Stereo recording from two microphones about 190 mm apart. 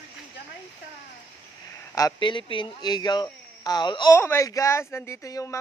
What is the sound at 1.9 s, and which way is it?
A man's voice, 20° left (ahead or behind).